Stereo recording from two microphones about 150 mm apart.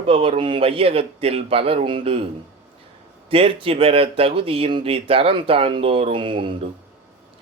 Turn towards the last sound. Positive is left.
turn(degrees=-35)  # may be behind; listen again after turning